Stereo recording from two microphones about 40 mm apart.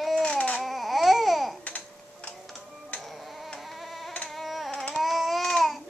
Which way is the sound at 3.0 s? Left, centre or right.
Centre.